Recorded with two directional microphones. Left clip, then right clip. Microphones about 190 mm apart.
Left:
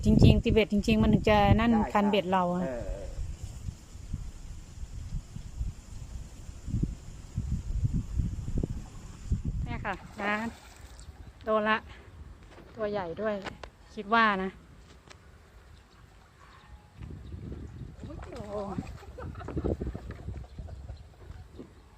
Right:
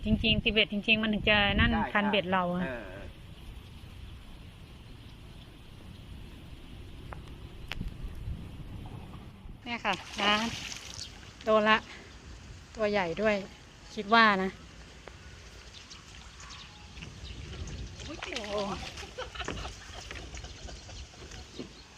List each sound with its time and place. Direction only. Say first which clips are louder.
0.0 s speech: left 2 dB; 25° left (ahead or behind)
9.6 s speech: right 5 dB; 5° left (ahead or behind)
18.2 s rowboat: right 4 dB; 10° left (ahead or behind)
19.2 s a sound: right 5 dB; 5° left (ahead or behind)